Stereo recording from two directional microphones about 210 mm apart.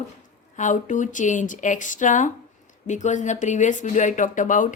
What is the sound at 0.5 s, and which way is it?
A woman's voice, 35° left (ahead or behind).